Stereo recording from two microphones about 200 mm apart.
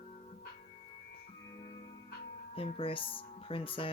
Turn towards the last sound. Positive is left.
turn(degrees=25)  # may be behind; listen again after turning